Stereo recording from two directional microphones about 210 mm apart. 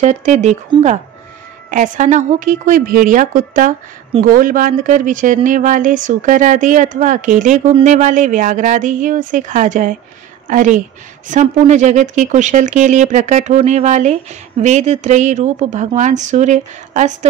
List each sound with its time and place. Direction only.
0.0 s speech: 35° right (ahead or behind)